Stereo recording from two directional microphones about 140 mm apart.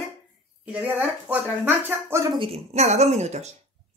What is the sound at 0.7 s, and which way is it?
Speech, 10° right (ahead or behind).